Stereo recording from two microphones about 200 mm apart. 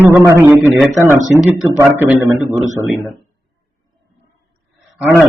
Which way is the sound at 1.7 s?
10° right (ahead or behind).